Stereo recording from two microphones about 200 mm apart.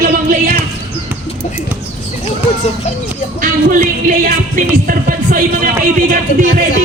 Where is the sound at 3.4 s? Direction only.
40° right (ahead or behind).